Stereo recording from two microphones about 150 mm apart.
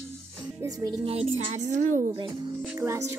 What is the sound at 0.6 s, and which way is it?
Speech, 25° right (ahead or behind).